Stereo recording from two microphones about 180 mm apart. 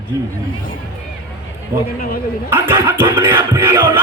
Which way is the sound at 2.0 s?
55° left (ahead or behind).